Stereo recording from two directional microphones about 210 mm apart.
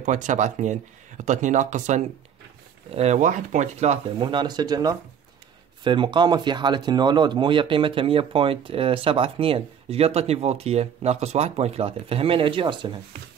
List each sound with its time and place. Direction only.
0.0 s speech: 35° right (ahead or behind)